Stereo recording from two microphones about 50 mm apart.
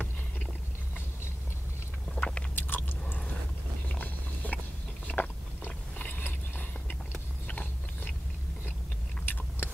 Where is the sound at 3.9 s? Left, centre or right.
Left.